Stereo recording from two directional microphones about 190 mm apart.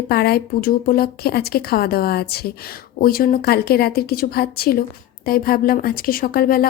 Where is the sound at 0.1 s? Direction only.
55° left (ahead or behind).